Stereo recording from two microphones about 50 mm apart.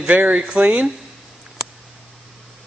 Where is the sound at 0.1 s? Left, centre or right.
Right.